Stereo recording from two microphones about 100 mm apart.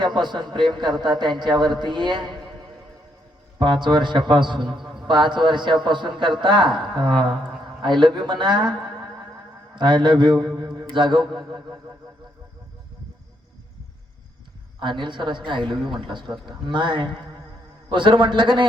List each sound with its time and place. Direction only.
0.0 s a man's voice: 50° right (ahead or behind)
9.7 s a man's voice: 50° right (ahead or behind)
14.8 s a man's voice: 50° right (ahead or behind)